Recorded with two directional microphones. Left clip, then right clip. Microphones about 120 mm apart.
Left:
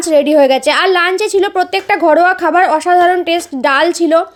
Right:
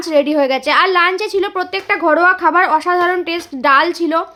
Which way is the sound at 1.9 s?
45° left (ahead or behind).